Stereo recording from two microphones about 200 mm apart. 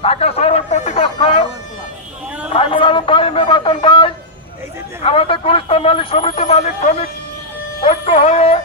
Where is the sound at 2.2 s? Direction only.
10° right (ahead or behind).